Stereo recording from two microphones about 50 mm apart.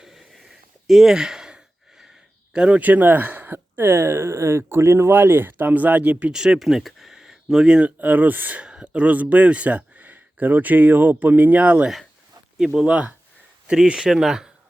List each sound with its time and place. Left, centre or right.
0.0 s a sound: centre
0.9 s sigh: centre
2.0 s a sound: centre
2.8 s speech: right
6.3 s speech: centre
6.6 s speech: centre
7.9 s speech: right
8.6 s speech: centre
12.5 s speech: centre
12.8 s speech: right